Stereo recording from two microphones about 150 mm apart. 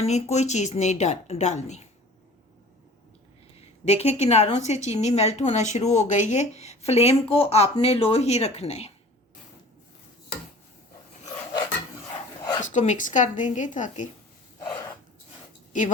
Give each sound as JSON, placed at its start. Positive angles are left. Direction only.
{"t": 0.0, "sound": "a woman's voice", "side_deg": 45}
{"t": 3.8, "sound": "a woman's voice", "side_deg": 45}
{"t": 12.6, "sound": "speech", "side_deg": 55}